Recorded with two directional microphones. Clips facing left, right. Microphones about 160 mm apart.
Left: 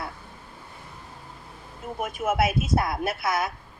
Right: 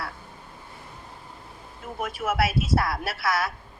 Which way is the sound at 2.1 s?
20° left (ahead or behind).